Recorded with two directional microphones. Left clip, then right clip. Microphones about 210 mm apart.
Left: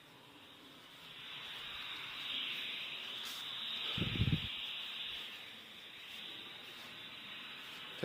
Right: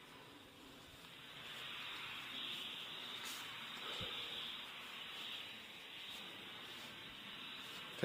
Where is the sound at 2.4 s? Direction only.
55° left (ahead or behind).